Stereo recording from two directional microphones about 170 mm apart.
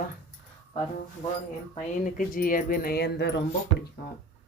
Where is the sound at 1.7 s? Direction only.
55° left (ahead or behind); by 3.4 s 85° left.